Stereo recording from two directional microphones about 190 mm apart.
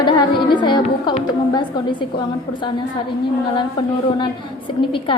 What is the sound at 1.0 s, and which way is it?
A woman's voice, 25° left (ahead or behind).